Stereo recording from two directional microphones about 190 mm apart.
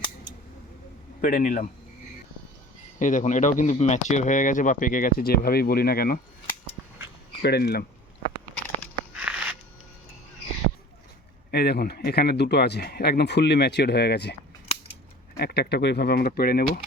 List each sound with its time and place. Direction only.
1.2 s speech: 45° left (ahead or behind)
3.0 s speech: 40° left (ahead or behind)
6.8 s a sound: centre (ahead or behind)
7.4 s speech: 60° left (ahead or behind)
9.1 s a sound: 5° right (ahead or behind)
11.5 s speech: 55° left (ahead or behind)
15.4 s speech: 60° left (ahead or behind)